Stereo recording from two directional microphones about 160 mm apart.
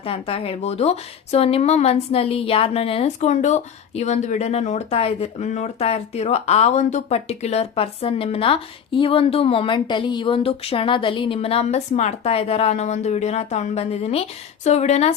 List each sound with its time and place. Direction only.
0.0 s speech: 35° left (ahead or behind)